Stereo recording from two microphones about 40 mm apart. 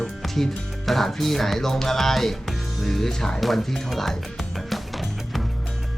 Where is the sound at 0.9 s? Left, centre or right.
Centre.